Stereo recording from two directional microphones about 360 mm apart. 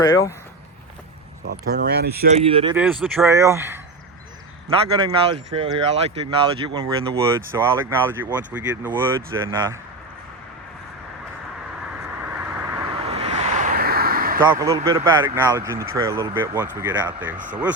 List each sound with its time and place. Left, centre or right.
0.0 s speech: centre
1.5 s speech: right
2.5 s speech: centre
2.7 s speech: centre
12.3 s vehicle: centre
13.1 s a sound: centre
14.8 s speech: centre
17.3 s speech: right